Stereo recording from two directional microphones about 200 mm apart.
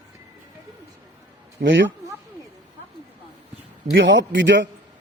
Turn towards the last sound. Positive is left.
turn(degrees=-65)  # may be behind; listen again after turning